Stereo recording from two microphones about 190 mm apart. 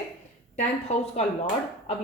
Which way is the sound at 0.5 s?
35° left (ahead or behind).